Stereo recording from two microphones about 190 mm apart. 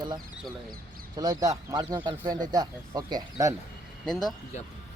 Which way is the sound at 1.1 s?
20° right (ahead or behind).